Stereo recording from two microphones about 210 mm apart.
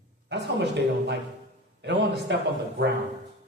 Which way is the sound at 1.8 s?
55° right (ahead or behind).